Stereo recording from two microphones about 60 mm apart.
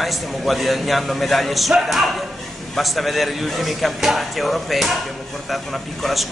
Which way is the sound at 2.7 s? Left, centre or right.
Centre.